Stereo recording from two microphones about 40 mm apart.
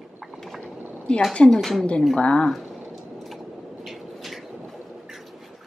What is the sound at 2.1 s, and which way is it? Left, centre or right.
Speech, left.